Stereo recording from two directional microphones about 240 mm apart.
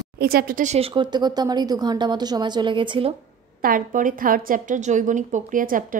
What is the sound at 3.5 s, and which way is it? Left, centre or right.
A woman's voice, right.